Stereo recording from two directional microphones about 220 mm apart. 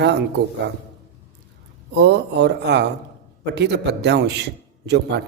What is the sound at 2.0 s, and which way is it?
A man's voice, 50° right (ahead or behind).